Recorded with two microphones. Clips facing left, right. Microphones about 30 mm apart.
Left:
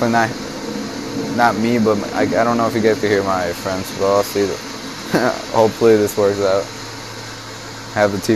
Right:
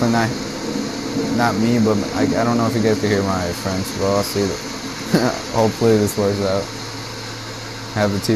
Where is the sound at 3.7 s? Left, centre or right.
Left.